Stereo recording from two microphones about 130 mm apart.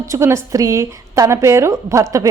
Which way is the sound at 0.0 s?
20° right (ahead or behind).